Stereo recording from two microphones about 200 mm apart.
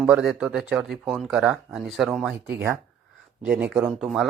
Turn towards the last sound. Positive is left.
turn(degrees=0)  # may be behind; listen again after turning